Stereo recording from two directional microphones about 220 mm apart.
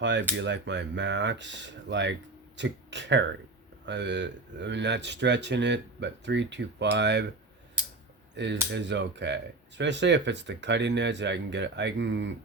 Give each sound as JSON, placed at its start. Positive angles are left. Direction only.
{"t": 0.0, "sound": "speech", "side_deg": -55}
{"t": 8.7, "sound": "speech", "side_deg": -50}